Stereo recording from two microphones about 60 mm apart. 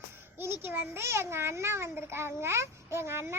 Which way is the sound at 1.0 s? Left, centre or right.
Right.